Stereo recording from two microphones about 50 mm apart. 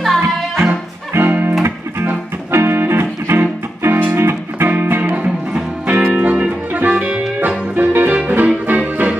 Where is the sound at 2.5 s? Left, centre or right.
Right.